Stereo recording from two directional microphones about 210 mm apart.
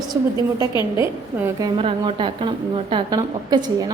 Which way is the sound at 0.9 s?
15° right (ahead or behind).